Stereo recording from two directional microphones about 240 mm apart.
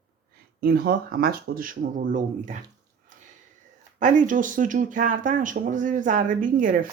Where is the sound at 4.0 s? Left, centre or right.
Right.